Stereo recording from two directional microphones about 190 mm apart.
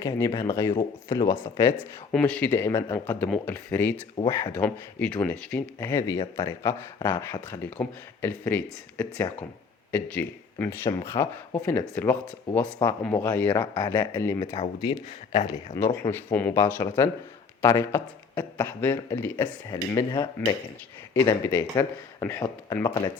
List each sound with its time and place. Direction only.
0.0 s speech: 20° left (ahead or behind)
4.2 s speech: 30° left (ahead or behind)
4.5 s speech: 10° left (ahead or behind)
14.4 s speech: 30° left (ahead or behind)